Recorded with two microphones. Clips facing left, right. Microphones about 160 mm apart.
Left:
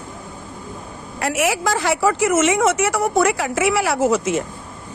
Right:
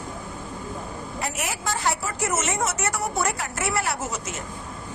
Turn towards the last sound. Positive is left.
turn(degrees=90)